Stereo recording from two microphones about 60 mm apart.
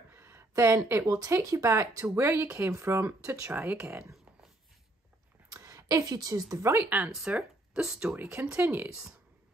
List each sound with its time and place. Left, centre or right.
0.1 s a sound: right
1.0 s speech: right
1.7 s speech: right
5.5 s a woman's voice: right
6.6 s speech: right
7.2 s a sound: right
7.8 s speech: centre
8.1 s speech: right